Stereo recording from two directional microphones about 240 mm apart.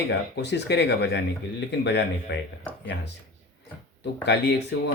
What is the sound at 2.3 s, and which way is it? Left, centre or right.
Speech, left.